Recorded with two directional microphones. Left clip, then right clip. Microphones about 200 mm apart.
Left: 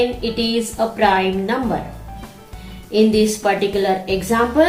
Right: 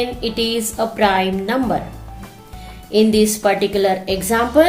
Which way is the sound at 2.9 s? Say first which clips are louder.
Right 1 dB; 55° right (ahead or behind).